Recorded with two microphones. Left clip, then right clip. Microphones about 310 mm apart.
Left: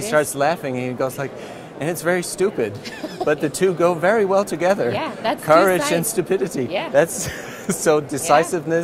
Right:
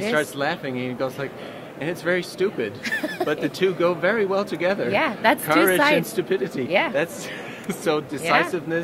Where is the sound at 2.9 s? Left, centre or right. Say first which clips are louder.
Right 3 dB; right.